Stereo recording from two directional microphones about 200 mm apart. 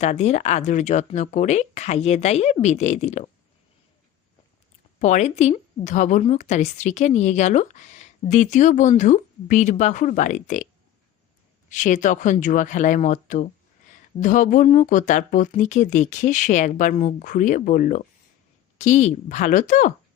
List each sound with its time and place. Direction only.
0.0 s a woman's voice: 35° left (ahead or behind)
4.9 s a woman's voice: 35° left (ahead or behind)
11.7 s a woman's voice: 40° left (ahead or behind)